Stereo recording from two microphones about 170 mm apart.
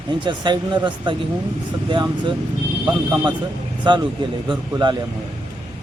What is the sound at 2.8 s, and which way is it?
Speech, 5° right (ahead or behind).